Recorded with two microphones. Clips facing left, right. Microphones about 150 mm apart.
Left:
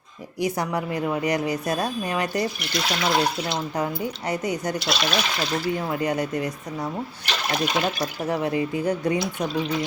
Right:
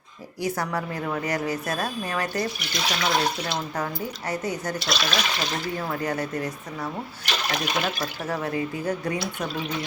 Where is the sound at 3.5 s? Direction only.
15° left (ahead or behind).